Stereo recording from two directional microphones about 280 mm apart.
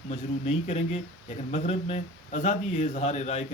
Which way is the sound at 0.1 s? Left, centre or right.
Left.